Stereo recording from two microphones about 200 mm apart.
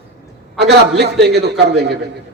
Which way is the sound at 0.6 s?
55° right (ahead or behind).